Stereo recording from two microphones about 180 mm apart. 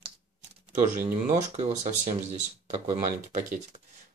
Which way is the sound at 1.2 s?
40° right (ahead or behind).